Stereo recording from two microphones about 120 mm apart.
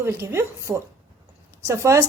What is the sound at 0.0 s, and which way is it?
A woman's voice, 20° right (ahead or behind).